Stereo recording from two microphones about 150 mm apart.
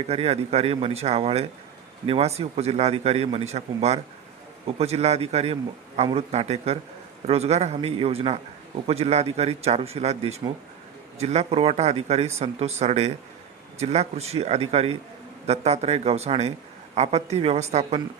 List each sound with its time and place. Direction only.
0.1 s a man's voice: 45° right (ahead or behind)